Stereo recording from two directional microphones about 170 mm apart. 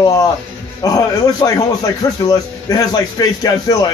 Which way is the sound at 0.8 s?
20° left (ahead or behind).